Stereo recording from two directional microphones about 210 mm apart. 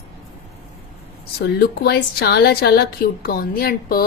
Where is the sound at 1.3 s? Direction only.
50° left (ahead or behind).